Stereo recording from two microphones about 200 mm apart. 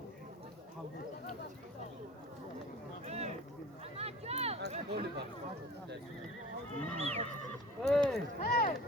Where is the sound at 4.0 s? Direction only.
30° right (ahead or behind).